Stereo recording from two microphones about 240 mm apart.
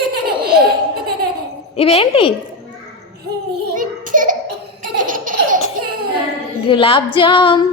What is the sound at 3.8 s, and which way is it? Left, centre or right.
Child singing, right.